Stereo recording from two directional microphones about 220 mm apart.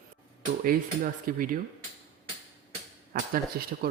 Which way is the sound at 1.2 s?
40° right (ahead or behind).